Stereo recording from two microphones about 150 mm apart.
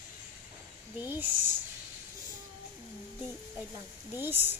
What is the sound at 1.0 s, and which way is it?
Speech, 10° right (ahead or behind).